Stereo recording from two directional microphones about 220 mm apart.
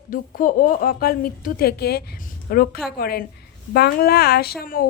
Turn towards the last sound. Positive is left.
turn(degrees=40)  # may be behind; listen again after turning